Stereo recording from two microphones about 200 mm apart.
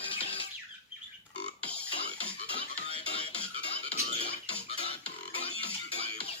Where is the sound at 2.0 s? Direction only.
30° left (ahead or behind).